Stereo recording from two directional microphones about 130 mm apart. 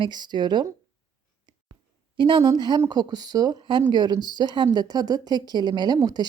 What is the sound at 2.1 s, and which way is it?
Speech, 35° right (ahead or behind).